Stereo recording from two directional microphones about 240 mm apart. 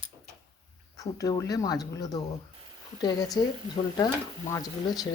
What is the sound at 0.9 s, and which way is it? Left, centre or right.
Speech, centre.